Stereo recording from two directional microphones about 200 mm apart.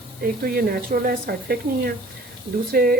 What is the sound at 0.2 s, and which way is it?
Speech, 50° right (ahead or behind).